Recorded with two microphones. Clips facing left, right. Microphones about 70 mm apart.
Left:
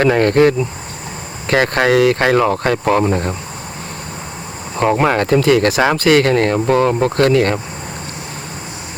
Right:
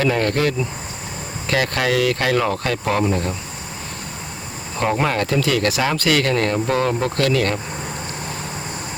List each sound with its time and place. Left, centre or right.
0.0 s speech: left
4.8 s speech: left